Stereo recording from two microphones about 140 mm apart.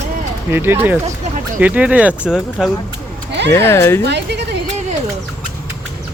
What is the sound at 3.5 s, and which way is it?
Speech, 15° left (ahead or behind).